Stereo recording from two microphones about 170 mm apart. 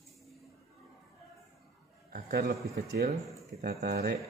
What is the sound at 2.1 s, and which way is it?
Speech, 65° right (ahead or behind).